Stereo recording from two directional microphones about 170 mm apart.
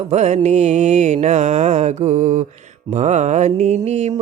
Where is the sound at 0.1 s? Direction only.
40° right (ahead or behind).